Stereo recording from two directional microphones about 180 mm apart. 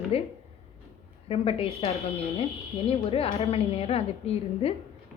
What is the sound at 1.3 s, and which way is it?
A woman's voice, 35° left (ahead or behind).